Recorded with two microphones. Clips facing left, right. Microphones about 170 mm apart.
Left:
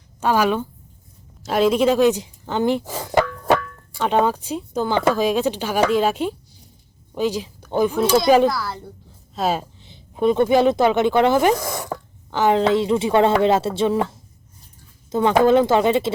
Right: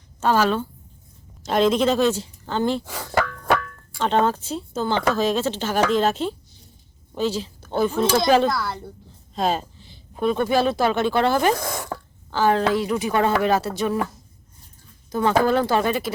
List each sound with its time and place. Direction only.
0.2 s speech: 10° left (ahead or behind)
2.9 s music: 20° left (ahead or behind)
3.9 s a woman's voice: 10° left (ahead or behind)
9.8 s speech: 20° left (ahead or behind)